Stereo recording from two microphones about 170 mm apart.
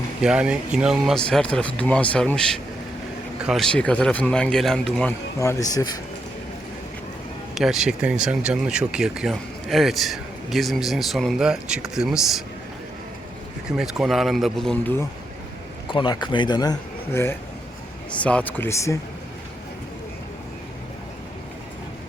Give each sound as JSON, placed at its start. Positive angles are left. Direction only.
{"t": 0.2, "sound": "speech", "side_deg": -5}
{"t": 5.4, "sound": "speech", "side_deg": 20}
{"t": 7.5, "sound": "speech", "side_deg": 0}
{"t": 13.7, "sound": "speech", "side_deg": -5}
{"t": 15.9, "sound": "speech", "side_deg": 25}
{"t": 17.1, "sound": "speech", "side_deg": 15}